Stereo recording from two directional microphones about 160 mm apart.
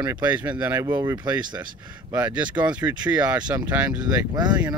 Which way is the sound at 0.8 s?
25° right (ahead or behind).